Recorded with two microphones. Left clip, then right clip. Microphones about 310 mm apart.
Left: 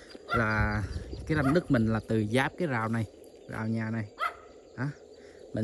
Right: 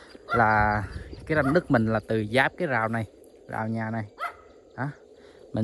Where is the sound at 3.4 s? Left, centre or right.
Centre.